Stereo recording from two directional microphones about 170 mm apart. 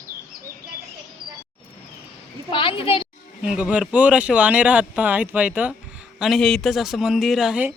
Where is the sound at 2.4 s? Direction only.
30° left (ahead or behind).